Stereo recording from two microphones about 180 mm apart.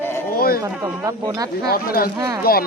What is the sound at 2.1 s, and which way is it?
Speech, 20° right (ahead or behind).